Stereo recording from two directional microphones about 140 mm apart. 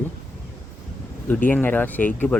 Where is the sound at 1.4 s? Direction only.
15° left (ahead or behind).